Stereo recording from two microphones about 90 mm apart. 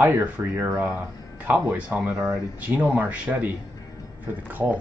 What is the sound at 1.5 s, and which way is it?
Speech, 15° right (ahead or behind).